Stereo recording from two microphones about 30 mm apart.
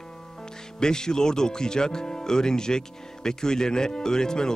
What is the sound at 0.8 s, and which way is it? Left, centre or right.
Speech, left.